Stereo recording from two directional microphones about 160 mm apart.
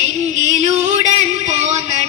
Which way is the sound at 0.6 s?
45° right (ahead or behind).